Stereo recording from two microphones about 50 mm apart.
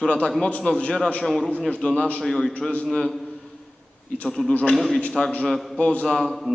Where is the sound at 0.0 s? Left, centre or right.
Left.